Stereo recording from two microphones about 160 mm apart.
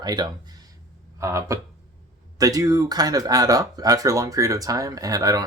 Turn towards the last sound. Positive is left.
turn(degrees=-20)  # may be behind; listen again after turning